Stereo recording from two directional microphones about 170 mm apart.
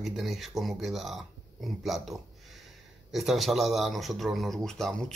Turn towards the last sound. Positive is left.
turn(degrees=0)  # may be behind; listen again after turning